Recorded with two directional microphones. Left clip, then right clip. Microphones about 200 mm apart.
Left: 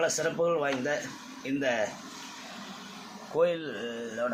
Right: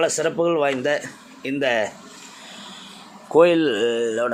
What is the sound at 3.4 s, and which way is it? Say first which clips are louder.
Speech: right 12 dB; 55° right (ahead or behind).